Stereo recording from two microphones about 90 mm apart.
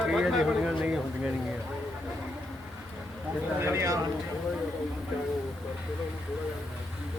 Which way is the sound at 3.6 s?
30° right (ahead or behind).